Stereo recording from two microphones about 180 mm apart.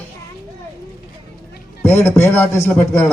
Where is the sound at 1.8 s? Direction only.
10° left (ahead or behind).